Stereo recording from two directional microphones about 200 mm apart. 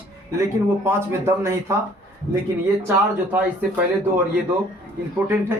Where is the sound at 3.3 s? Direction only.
10° right (ahead or behind).